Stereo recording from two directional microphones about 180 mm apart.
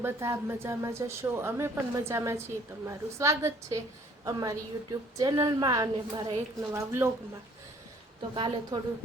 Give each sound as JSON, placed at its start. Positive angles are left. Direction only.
{"t": 0.0, "sound": "a woman's voice", "side_deg": -15}
{"t": 8.4, "sound": "a woman's voice", "side_deg": -30}